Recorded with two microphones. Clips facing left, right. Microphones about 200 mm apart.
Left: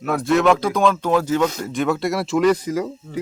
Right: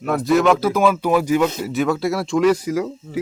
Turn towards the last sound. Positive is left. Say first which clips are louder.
# right 1 dB
turn(degrees=0)  # may be behind; listen again after turning